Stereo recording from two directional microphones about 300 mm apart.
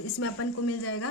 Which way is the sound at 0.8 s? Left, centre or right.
Left.